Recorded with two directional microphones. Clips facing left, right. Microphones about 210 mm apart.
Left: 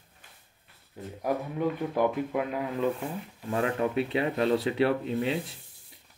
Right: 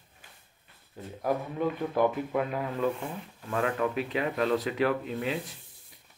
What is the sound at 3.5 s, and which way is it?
Speech, 25° left (ahead or behind).